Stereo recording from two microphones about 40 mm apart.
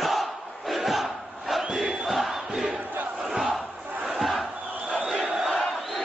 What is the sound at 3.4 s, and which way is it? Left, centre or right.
Crowd, right.